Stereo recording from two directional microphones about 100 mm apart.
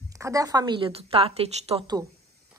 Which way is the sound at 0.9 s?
80° right.